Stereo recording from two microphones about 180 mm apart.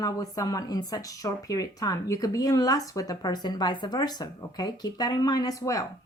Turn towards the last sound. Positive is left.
turn(degrees=20)  # may be behind; listen again after turning